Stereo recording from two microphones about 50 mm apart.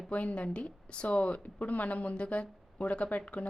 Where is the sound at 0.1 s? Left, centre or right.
Left.